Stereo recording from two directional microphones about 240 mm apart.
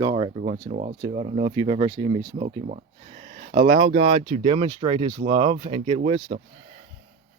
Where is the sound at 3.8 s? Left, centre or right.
Right.